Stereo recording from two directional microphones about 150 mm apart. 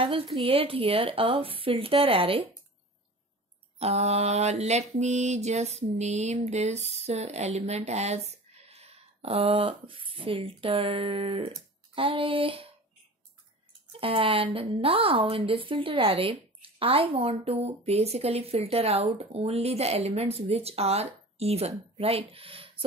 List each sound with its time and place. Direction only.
0.4 s a woman's voice: 40° right (ahead or behind)
3.8 s mantra: 45° right (ahead or behind)
13.9 s a woman's voice: 35° right (ahead or behind)